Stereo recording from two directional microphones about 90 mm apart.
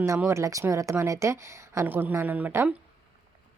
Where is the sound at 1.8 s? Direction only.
20° right (ahead or behind).